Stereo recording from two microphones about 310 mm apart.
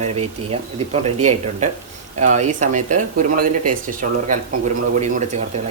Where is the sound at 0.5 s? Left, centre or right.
Centre.